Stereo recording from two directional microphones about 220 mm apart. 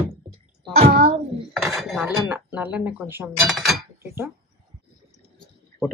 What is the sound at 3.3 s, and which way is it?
Speech, centre (ahead or behind).